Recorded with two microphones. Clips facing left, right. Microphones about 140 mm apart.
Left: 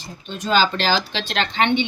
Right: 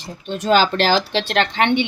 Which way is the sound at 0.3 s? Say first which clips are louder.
Right 3 dB; 70° right (ahead or behind).